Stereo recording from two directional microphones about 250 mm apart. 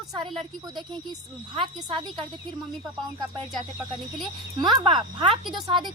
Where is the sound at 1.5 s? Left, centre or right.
Centre.